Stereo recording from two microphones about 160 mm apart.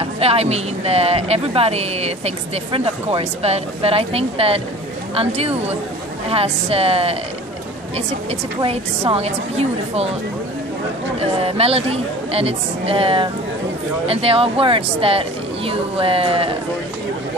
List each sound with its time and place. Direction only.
0.0 s a woman's voice: 40° right (ahead or behind)
8.6 s a woman's voice: 40° right (ahead or behind)
11.1 s a woman's voice: 40° right (ahead or behind)